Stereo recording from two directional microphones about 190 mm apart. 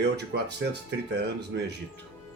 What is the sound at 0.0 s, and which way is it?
Speech, 60° right (ahead or behind).